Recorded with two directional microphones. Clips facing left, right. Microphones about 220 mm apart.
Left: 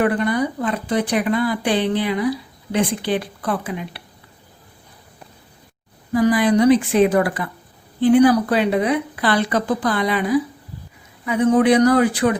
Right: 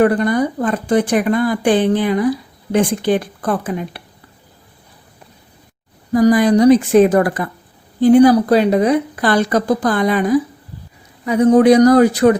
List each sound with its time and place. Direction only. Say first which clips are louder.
0.0 s speech: right 5 dB; 40° right (ahead or behind)
6.1 s a woman's voice: right 4 dB; 40° right (ahead or behind)